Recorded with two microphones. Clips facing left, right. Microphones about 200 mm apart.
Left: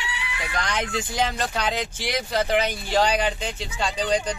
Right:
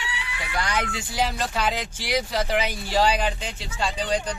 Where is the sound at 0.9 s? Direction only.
5° right (ahead or behind).